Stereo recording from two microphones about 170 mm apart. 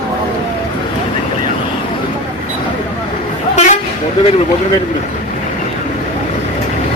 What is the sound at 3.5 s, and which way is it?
Vehicle, 45° left (ahead or behind).